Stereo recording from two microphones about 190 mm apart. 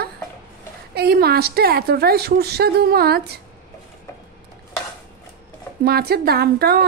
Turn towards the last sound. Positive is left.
turn(degrees=-55)  # may be behind; listen again after turning